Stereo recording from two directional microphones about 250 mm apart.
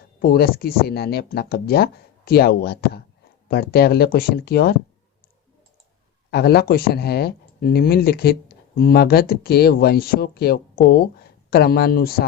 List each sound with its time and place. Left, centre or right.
0.2 s speech: left
6.3 s speech: left